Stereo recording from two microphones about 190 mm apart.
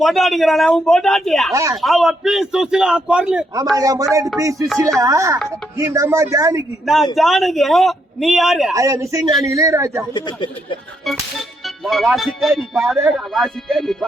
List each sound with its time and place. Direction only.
0.0 s a man's voice: centre (ahead or behind)
3.8 s speech: 20° right (ahead or behind)
6.8 s a man's voice: centre (ahead or behind)
8.7 s speech: 15° right (ahead or behind)
10.2 s speech: 25° left (ahead or behind)
11.6 s a man's voice: centre (ahead or behind)